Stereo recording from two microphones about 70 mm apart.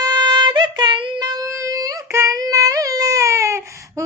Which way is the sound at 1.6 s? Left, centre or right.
Right.